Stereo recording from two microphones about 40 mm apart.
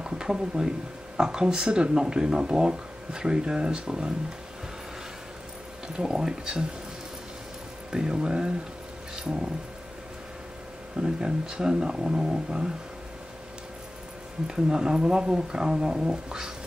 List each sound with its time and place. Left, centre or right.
0.0 s speech: centre
5.9 s speech: centre
7.9 s speech: centre
11.0 s speech: right
14.5 s speech: centre